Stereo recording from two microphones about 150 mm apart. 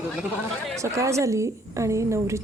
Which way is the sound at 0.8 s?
20° right (ahead or behind).